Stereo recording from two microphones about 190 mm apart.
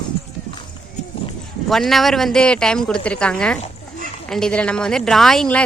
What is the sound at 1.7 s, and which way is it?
Speech, centre (ahead or behind).